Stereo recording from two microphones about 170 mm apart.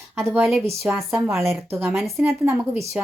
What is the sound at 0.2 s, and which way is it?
A woman's voice, 15° right (ahead or behind).